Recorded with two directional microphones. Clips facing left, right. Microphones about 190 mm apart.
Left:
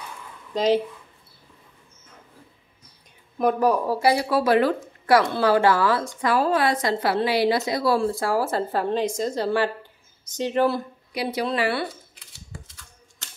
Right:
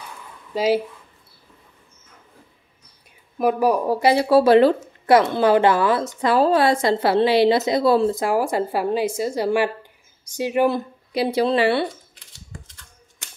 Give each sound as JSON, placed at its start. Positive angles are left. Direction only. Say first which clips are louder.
{"t": 0.6, "sound": "speech", "louder": "right 1 dB", "side_deg": -5}
{"t": 3.3, "sound": "a woman's voice", "louder": "right 2 dB", "side_deg": -10}
{"t": 11.1, "sound": "a woman's voice", "louder": "right 6 dB", "side_deg": -30}